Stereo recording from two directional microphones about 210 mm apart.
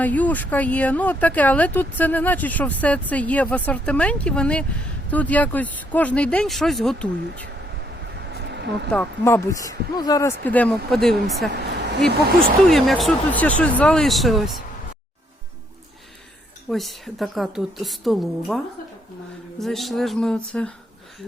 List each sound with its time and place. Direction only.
0.0 s speech: 5° left (ahead or behind)
8.3 s a sound: 55° right (ahead or behind)
8.9 s a woman's voice: 10° left (ahead or behind)
12.6 s a woman's voice: centre (ahead or behind)
16.6 s a woman's voice: centre (ahead or behind)